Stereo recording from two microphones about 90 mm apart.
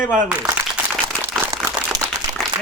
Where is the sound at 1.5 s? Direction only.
40° right (ahead or behind).